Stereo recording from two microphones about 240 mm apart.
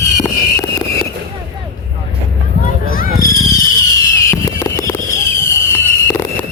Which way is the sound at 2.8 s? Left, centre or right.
Left.